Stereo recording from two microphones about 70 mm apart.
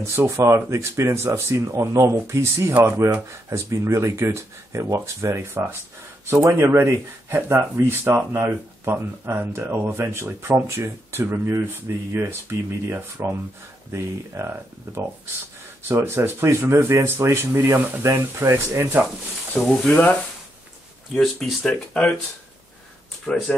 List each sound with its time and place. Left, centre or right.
0.2 s speech: right
19.7 s speech: centre
21.1 s speech: centre
23.2 s speech: centre